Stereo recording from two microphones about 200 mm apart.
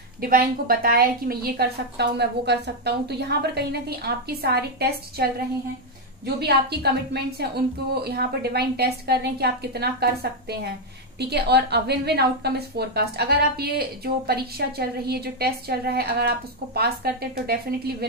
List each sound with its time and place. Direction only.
0.2 s a woman's voice: 45° right (ahead or behind)
7.9 s a woman's voice: 50° right (ahead or behind)
11.1 s a woman's voice: 55° right (ahead or behind)